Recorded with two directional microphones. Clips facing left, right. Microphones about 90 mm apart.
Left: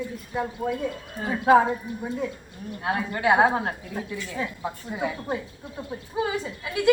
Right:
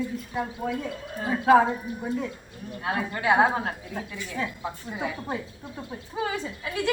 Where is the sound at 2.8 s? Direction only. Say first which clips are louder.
Left 2 dB; 25° left (ahead or behind).